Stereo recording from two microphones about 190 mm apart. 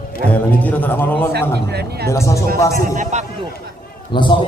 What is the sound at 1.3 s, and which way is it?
Speech, 60° right (ahead or behind).